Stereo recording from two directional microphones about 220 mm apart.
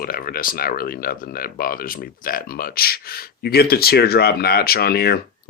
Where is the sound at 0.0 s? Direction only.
40° left (ahead or behind).